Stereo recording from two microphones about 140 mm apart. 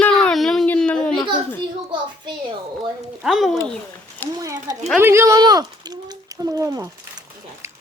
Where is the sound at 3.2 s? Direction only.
Centre (ahead or behind).